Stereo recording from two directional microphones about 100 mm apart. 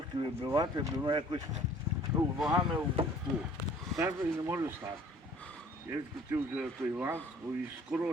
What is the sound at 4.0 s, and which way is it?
Speech, 30° right (ahead or behind).